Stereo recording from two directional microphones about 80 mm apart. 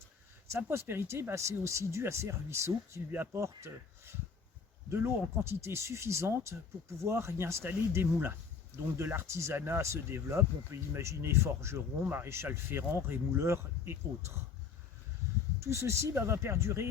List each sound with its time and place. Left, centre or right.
0.5 s speech: right
15.6 s speech: right